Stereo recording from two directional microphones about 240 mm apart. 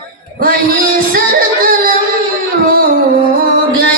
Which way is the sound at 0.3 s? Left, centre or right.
Right.